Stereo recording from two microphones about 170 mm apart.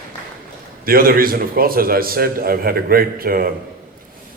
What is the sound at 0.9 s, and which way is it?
A man's voice, 60° right (ahead or behind).